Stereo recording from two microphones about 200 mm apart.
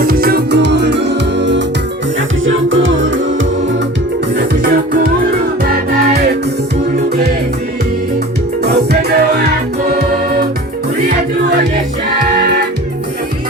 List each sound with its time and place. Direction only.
0.0 s music: 50° right (ahead or behind)
2.5 s music: 75° right (ahead or behind)
4.4 s music: 50° right (ahead or behind)
8.7 s music: 55° right (ahead or behind)